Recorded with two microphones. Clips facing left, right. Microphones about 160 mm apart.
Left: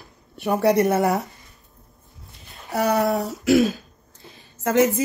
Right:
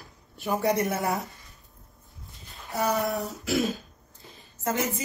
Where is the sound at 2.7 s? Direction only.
70° left (ahead or behind).